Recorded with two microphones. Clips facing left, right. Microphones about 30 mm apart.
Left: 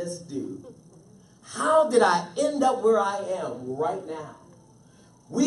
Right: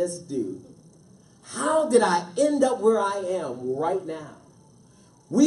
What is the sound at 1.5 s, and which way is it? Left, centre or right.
Speech, centre.